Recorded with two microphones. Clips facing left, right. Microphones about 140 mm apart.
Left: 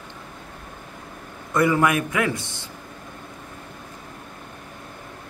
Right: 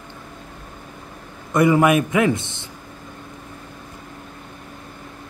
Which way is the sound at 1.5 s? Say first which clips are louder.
Right 4 dB; 20° right (ahead or behind).